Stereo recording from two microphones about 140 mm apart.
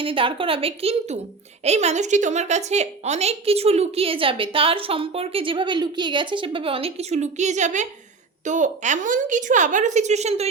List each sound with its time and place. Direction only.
0.0 s a woman's voice: 40° right (ahead or behind)